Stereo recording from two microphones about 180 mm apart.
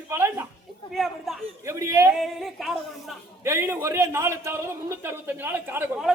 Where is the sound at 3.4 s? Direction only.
15° right (ahead or behind).